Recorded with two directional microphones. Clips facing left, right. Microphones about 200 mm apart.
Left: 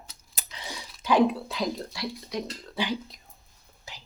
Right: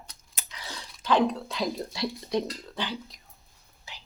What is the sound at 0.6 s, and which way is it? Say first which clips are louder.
Speech: left 1 dB; 10° left (ahead or behind).